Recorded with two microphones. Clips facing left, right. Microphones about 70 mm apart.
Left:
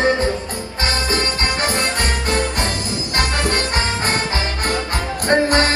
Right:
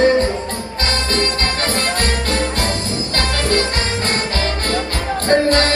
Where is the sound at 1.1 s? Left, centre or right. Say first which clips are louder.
Right 1 dB; centre.